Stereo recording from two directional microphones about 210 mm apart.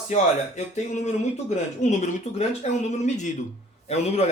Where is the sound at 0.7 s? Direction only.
35° left (ahead or behind).